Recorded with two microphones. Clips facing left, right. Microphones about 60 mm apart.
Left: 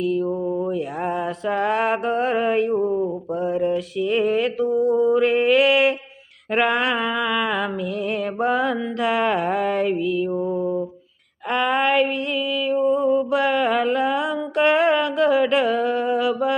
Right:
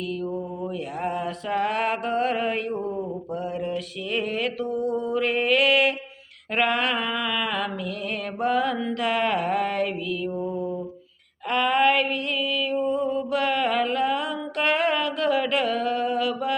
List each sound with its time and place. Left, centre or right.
0.7 s mantra: centre
3.4 s music: left